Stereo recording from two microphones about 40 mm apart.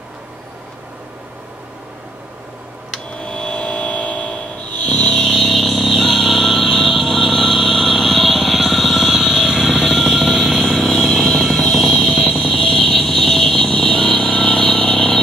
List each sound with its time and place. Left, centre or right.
3.2 s vehicle: left
4.9 s a sound: centre
12.4 s vehicle: centre